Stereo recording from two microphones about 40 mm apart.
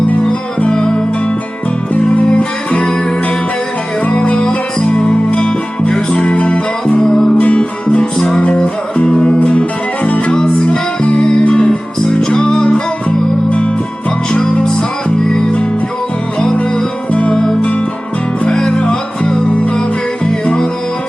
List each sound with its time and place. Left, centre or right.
0.7 s music: left
2.0 s music: left
4.1 s music: left
7.0 s music: centre
7.3 s music: left
9.4 s music: left
10.3 s music: centre
17.1 s music: left
17.3 s music: centre